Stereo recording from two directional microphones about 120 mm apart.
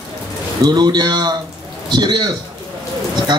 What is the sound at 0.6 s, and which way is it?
A man's voice, 35° right (ahead or behind).